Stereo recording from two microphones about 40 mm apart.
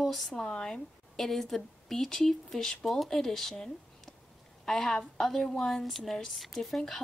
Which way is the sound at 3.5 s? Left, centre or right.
Centre.